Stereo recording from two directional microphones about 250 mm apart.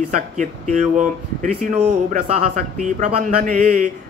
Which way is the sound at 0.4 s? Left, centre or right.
Right.